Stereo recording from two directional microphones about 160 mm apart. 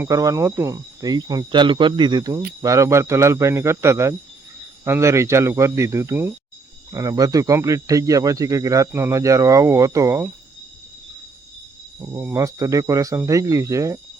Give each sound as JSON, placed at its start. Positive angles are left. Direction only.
{"t": 0.0, "sound": "speech", "side_deg": -20}
{"t": 11.9, "sound": "speech", "side_deg": -15}